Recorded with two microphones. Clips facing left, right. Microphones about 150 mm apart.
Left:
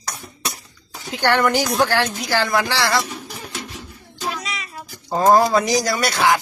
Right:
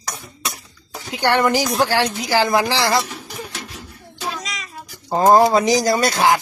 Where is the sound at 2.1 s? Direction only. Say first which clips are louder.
Right 3 dB; 15° right (ahead or behind).